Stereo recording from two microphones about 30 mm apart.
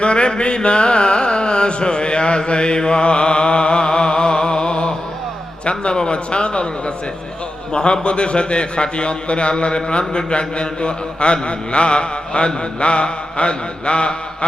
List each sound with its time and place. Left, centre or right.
0.0 s carnatic music: left
5.6 s a man's voice: left